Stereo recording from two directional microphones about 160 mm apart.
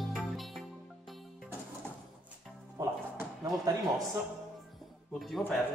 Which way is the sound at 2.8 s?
20° right (ahead or behind).